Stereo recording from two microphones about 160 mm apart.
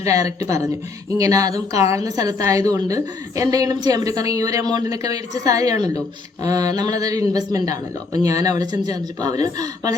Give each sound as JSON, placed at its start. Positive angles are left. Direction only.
{"t": 0.1, "sound": "a woman's voice", "side_deg": -20}